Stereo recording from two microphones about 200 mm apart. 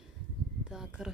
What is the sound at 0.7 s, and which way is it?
Speech, 5° right (ahead or behind).